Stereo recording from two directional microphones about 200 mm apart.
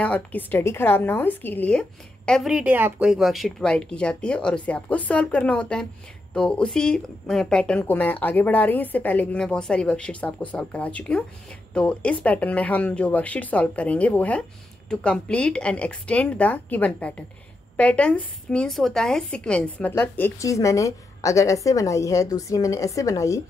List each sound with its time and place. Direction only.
0.0 s a woman's voice: 10° left (ahead or behind)